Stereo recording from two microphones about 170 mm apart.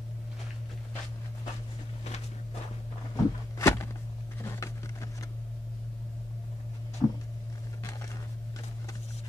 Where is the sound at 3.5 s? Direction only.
15° left (ahead or behind).